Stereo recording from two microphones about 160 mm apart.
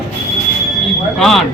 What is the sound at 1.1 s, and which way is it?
Speech, centre (ahead or behind).